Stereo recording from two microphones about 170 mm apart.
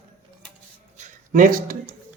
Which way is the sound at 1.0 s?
55° right (ahead or behind).